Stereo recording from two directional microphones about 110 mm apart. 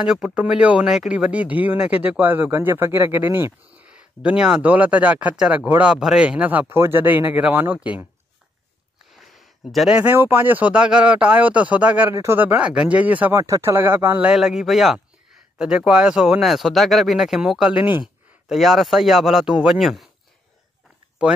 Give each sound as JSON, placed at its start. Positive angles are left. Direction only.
{"t": 0.0, "sound": "speech", "side_deg": -10}
{"t": 9.1, "sound": "a sound", "side_deg": 0}
{"t": 9.9, "sound": "speech", "side_deg": -15}
{"t": 13.4, "sound": "speech", "side_deg": -25}
{"t": 21.2, "sound": "speech", "side_deg": -10}